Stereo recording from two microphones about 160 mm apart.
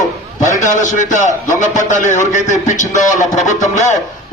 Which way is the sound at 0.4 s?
55° left (ahead or behind).